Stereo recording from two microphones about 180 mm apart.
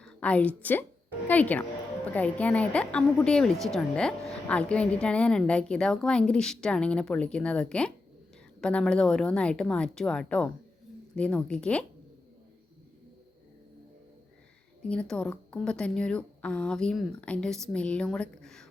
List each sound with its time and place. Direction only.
0.0 s a woman's voice: 5° left (ahead or behind)
14.8 s a woman's voice: 5° left (ahead or behind)